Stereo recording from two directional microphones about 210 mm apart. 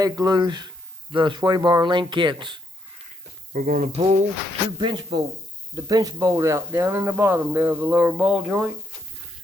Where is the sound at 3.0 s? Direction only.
35° right (ahead or behind).